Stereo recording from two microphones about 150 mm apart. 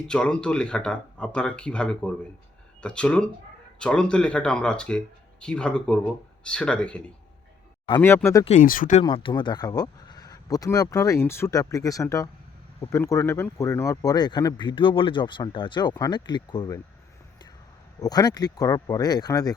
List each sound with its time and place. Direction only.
0.1 s speech: 5° left (ahead or behind)
8.0 s speech: 20° left (ahead or behind)
8.6 s speech: 65° left (ahead or behind)
9.0 s speech: 35° left (ahead or behind)
18.0 s speech: 25° left (ahead or behind)